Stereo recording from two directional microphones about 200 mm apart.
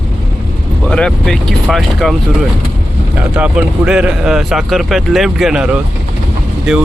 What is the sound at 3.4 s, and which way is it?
Speech, 5° right (ahead or behind).